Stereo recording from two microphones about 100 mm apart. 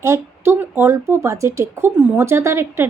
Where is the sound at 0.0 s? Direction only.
25° right (ahead or behind).